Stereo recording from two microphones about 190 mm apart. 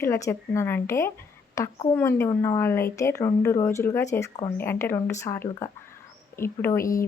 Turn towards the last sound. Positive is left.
turn(degrees=10)  # may be behind; listen again after turning